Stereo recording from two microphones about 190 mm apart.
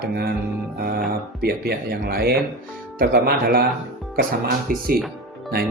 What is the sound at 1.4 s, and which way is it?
Speech, 55° right (ahead or behind).